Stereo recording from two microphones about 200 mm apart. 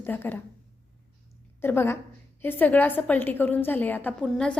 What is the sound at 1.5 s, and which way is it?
A woman's voice, 10° left (ahead or behind).